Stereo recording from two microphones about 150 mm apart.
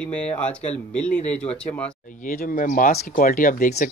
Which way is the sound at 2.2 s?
65° left (ahead or behind).